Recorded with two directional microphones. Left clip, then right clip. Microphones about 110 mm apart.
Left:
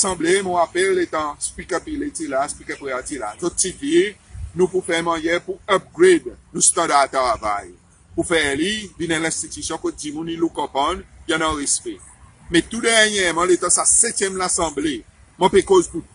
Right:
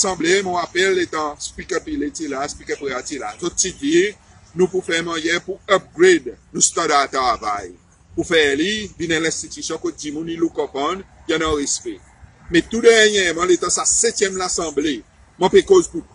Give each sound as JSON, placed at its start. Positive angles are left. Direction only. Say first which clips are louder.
{"t": 0.0, "sound": "a man's voice", "louder": "right 1 dB", "side_deg": 25}